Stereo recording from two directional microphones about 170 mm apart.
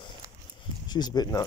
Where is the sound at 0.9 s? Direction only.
25° left (ahead or behind).